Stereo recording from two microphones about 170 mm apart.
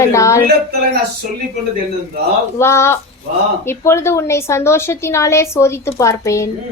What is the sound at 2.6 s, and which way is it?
A woman's voice, 15° left (ahead or behind).